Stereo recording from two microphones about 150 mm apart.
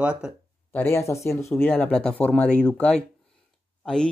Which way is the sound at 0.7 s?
15° left (ahead or behind).